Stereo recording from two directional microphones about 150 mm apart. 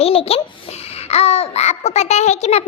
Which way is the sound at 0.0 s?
40° left (ahead or behind).